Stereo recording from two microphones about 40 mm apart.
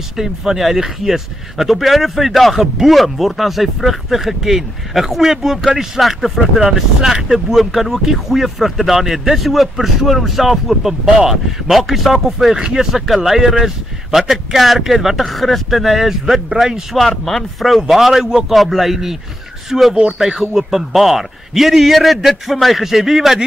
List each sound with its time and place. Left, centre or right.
0.2 s speech: centre
17.2 s speech: centre